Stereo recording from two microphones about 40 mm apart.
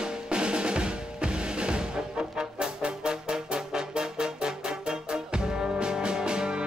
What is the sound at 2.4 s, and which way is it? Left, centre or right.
Brass instrument, right.